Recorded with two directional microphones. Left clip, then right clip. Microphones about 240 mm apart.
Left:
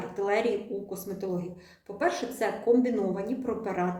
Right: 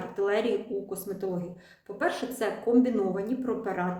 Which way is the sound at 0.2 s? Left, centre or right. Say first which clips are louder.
Even; centre.